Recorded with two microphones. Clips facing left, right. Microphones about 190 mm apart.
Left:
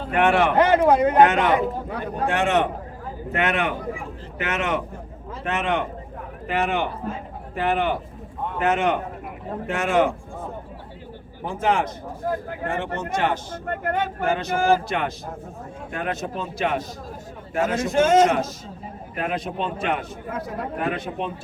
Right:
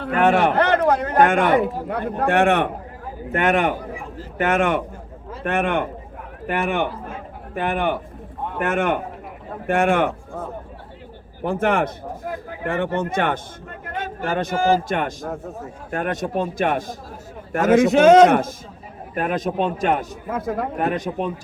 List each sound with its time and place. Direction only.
0.2 s a man's voice: 40° right (ahead or behind)
0.6 s speech: 5° left (ahead or behind)
1.2 s a man's voice: 50° right (ahead or behind)
3.3 s a man's voice: 45° right (ahead or behind)
11.4 s a man's voice: 60° right (ahead or behind)
13.7 s speech: 60° left (ahead or behind)
14.3 s a man's voice: 50° right (ahead or behind)
14.5 s speech: 55° left (ahead or behind)
14.8 s a man's voice: 50° right (ahead or behind)
17.5 s a man's voice: 70° right (ahead or behind)
19.1 s a man's voice: 45° right (ahead or behind)